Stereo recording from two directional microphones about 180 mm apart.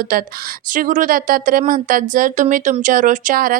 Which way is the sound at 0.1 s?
50° right (ahead or behind).